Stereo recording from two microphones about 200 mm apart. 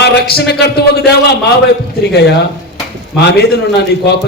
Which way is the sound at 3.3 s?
55° left (ahead or behind).